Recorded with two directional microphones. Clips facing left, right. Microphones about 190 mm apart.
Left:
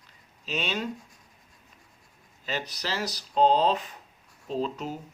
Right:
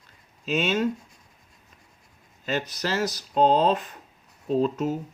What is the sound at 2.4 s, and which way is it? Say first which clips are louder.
Speech: right 5 dB; 50° right (ahead or behind).